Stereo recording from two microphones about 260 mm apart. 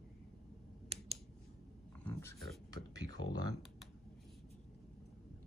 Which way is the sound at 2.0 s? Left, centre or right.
Centre.